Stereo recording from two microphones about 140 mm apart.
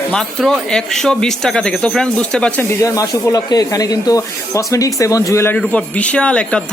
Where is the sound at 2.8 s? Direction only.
25° left (ahead or behind).